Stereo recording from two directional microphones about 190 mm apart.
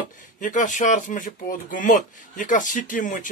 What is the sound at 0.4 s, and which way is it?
Speech, 40° left (ahead or behind).